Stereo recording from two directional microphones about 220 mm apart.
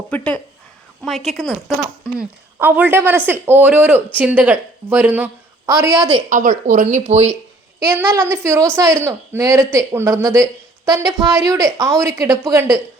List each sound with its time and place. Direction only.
0.1 s a woman's voice: 5° left (ahead or behind); by 6.2 s 20° right (ahead or behind)
6.3 s speech: 35° right (ahead or behind)
7.8 s speech: 10° right (ahead or behind)